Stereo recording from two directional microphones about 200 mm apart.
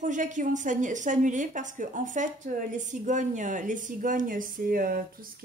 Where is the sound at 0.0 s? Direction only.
40° right (ahead or behind).